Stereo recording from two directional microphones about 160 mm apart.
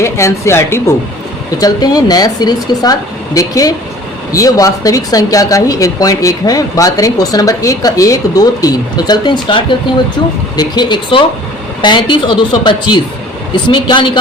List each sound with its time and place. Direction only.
0.0 s speech: 15° left (ahead or behind)